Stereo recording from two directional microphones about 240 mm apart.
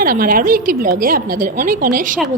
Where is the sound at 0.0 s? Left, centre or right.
Right.